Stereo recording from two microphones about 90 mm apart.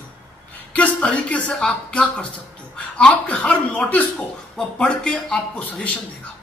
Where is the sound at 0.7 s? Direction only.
15° left (ahead or behind).